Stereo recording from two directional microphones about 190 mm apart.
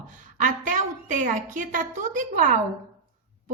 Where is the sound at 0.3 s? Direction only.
45° right (ahead or behind).